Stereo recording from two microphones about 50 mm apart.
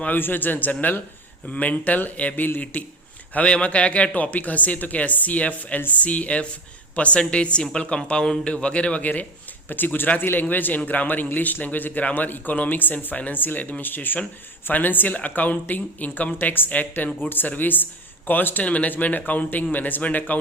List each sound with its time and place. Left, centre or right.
0.0 s speech: left
3.4 s a man's voice: left